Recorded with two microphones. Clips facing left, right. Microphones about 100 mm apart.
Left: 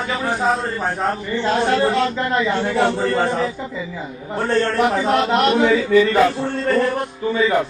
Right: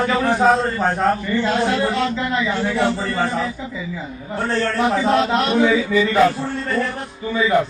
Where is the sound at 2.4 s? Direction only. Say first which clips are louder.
Left 4 dB; 25° left (ahead or behind).